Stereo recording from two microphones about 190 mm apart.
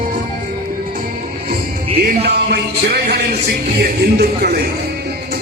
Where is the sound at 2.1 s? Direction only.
60° right (ahead or behind).